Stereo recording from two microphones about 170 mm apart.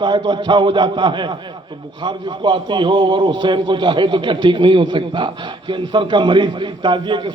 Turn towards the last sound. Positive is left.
turn(degrees=-25)  # may be behind; listen again after turning